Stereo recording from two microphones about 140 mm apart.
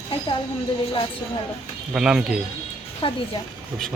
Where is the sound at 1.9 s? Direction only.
5° right (ahead or behind).